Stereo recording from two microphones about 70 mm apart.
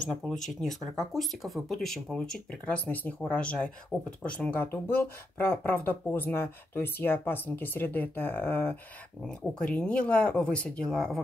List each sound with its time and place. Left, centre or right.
0.0 s speech: centre
2.1 s speech: centre
4.5 s speech: left
9.3 s speech: centre
10.9 s speech: centre